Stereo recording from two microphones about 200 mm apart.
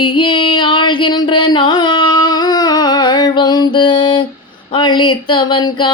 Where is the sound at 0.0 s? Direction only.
25° left (ahead or behind).